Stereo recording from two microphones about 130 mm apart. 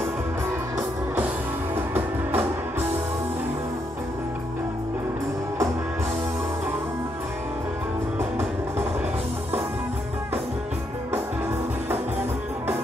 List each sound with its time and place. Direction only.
1.8 s music: 15° right (ahead or behind)